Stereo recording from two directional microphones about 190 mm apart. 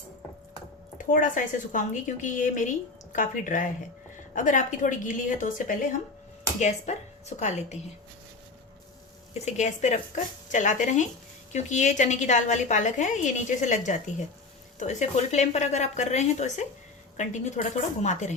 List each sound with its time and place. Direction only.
1.1 s a woman's voice: 45° left (ahead or behind)
9.3 s a woman's voice: 35° left (ahead or behind)